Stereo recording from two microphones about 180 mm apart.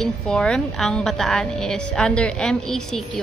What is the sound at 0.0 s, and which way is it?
Speech, 5° left (ahead or behind).